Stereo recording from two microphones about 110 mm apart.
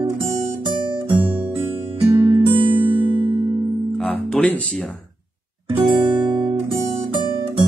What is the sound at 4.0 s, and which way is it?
Music, 5° left (ahead or behind).